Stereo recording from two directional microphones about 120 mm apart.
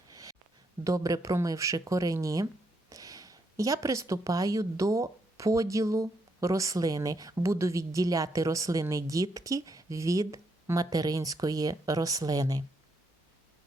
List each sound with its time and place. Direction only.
0.9 s speech: 30° right (ahead or behind)